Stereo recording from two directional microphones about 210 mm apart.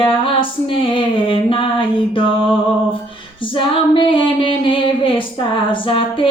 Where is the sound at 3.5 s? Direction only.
25° left (ahead or behind).